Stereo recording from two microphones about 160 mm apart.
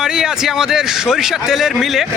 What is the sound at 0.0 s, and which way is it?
Speech, 5° right (ahead or behind).